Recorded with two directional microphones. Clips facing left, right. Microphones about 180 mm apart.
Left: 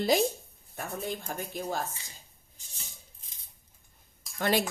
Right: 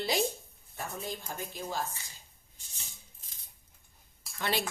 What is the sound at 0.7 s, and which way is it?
Speech, 60° left (ahead or behind).